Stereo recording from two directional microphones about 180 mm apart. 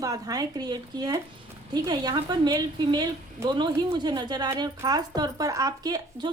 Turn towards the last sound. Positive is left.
turn(degrees=-20)  # may be behind; listen again after turning